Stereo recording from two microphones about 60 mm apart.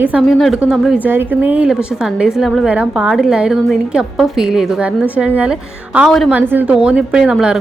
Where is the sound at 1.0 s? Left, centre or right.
Right.